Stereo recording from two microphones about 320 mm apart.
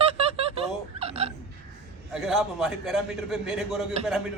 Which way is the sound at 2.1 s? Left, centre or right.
Centre.